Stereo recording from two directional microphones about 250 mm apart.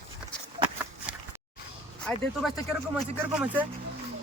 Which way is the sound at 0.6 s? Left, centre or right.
Right.